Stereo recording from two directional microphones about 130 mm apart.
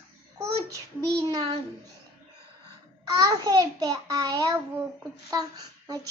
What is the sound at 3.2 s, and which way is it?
A child's voice, 30° right (ahead or behind).